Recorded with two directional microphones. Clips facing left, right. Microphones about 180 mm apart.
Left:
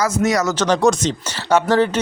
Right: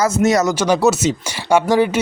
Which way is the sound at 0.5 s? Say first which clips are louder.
Right 1 dB; 10° right (ahead or behind).